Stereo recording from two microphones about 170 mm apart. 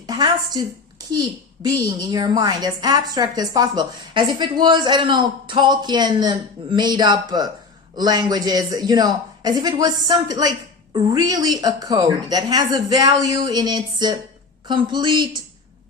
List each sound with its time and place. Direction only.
0.1 s a woman's voice: 25° right (ahead or behind)